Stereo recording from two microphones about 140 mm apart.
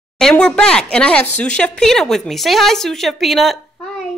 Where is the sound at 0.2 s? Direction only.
5° left (ahead or behind).